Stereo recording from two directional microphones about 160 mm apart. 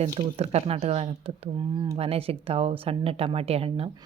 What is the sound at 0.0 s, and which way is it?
Speech, 40° right (ahead or behind).